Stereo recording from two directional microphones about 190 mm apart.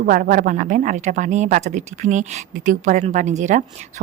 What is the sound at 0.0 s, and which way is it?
Speech, 45° right (ahead or behind).